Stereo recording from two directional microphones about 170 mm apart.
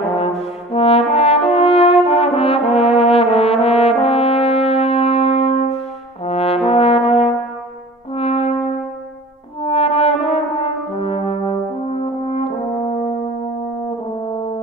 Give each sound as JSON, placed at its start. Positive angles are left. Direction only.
{"t": 0.0, "sound": "french horn", "side_deg": 35}
{"t": 6.2, "sound": "brass instrument", "side_deg": 35}
{"t": 9.7, "sound": "brass instrument", "side_deg": 35}
{"t": 14.2, "sound": "french horn", "side_deg": 35}